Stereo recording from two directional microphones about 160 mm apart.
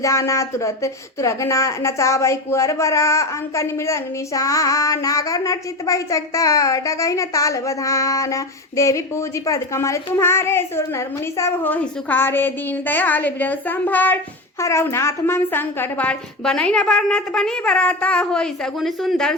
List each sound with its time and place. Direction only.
0.0 s a woman's voice: 20° left (ahead or behind); by 19.3 s centre (ahead or behind)